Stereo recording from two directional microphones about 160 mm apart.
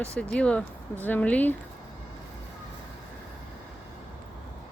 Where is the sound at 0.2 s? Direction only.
5° left (ahead or behind).